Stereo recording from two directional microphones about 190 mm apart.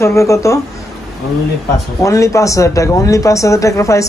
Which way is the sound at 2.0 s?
15° left (ahead or behind).